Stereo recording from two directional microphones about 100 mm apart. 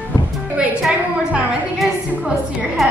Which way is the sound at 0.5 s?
10° right (ahead or behind).